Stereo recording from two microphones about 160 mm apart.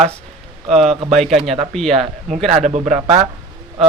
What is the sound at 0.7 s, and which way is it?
A man's voice, centre (ahead or behind).